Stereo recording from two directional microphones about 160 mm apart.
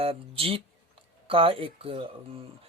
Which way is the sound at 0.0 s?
35° right (ahead or behind).